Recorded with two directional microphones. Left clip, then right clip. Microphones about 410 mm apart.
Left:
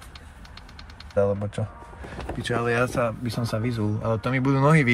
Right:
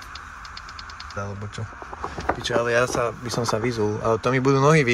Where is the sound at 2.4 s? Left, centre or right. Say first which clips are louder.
Right 2 dB; centre.